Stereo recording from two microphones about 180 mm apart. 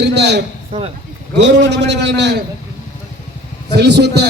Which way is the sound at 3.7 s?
70° right (ahead or behind).